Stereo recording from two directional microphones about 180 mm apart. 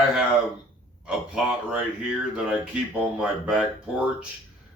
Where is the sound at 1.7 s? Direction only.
5° right (ahead or behind).